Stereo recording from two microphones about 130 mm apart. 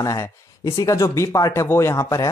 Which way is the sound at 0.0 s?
25° left (ahead or behind).